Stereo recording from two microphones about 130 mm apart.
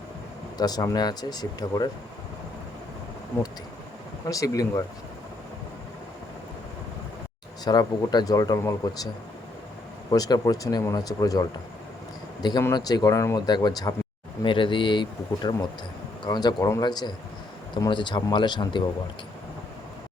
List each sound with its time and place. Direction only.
0.5 s speech: 30° left (ahead or behind)
4.3 s speech: 25° left (ahead or behind)
7.6 s speech: 30° left (ahead or behind)
10.1 s speech: 30° left (ahead or behind)
14.4 s speech: 40° left (ahead or behind)